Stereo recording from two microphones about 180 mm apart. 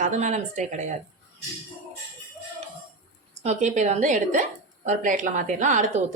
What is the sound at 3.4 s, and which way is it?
A woman's voice, 40° right (ahead or behind).